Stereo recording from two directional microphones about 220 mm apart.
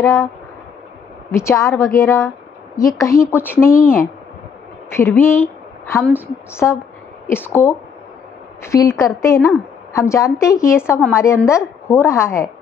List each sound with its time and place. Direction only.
0.0 s a woman's voice: 15° left (ahead or behind)
1.3 s a woman's voice: 10° left (ahead or behind)
3.6 s a woman's voice: 40° left (ahead or behind)
4.9 s a woman's voice: 10° left (ahead or behind)